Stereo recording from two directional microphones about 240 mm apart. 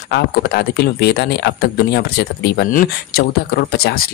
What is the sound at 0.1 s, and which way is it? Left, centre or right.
Speech, left.